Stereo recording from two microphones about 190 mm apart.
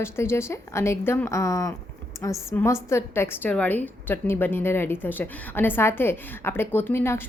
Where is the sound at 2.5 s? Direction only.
15° left (ahead or behind).